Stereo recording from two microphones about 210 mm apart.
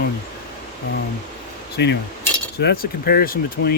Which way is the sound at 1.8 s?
55° left (ahead or behind).